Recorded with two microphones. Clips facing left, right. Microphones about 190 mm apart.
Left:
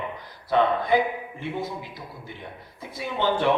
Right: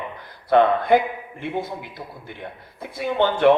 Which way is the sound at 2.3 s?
60° right (ahead or behind).